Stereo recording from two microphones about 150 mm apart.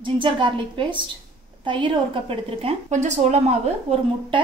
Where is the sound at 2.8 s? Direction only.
50° right (ahead or behind).